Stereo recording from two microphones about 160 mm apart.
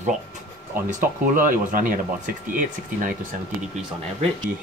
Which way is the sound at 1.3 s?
55° right (ahead or behind).